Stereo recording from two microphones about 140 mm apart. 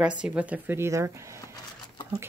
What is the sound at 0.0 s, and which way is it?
Speech, 10° right (ahead or behind).